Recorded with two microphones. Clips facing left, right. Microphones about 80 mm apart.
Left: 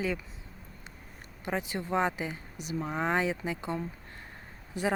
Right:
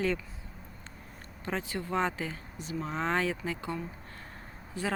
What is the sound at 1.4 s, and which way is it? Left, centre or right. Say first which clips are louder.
Speech: left 1 dB; centre.